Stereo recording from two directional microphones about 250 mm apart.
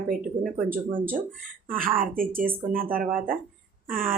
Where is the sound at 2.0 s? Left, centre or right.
Right.